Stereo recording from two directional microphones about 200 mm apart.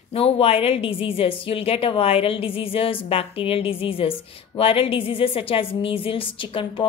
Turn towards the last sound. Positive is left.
turn(degrees=25)  # may be behind; listen again after turning